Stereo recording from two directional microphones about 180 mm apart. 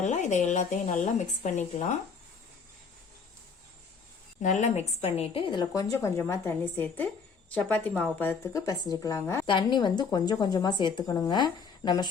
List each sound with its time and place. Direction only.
0.0 s a woman's voice: 40° left (ahead or behind)
4.4 s a woman's voice: 40° left (ahead or behind); by 9.5 s 15° left (ahead or behind)
9.5 s a woman's voice: 25° left (ahead or behind)